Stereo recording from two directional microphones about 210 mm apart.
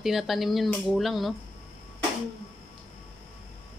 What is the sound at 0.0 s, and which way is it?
Speech, centre (ahead or behind).